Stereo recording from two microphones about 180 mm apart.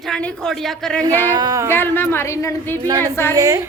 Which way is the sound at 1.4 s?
20° right (ahead or behind).